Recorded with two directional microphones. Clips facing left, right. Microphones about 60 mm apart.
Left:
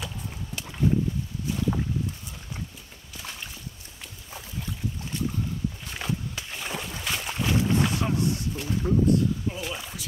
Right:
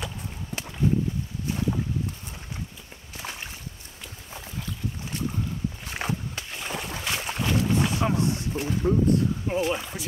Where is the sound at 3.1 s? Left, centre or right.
Right.